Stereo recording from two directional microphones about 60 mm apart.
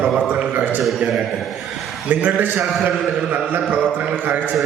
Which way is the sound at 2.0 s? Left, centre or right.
Right.